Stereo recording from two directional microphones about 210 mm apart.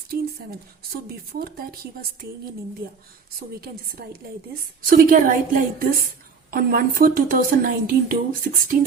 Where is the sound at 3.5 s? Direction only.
45° right (ahead or behind).